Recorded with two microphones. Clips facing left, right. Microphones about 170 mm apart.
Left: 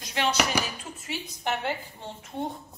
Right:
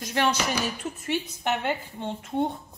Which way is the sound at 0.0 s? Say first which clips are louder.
Right 4 dB; 50° right (ahead or behind).